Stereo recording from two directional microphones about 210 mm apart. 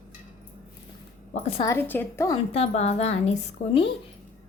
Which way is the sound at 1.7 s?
10° left (ahead or behind).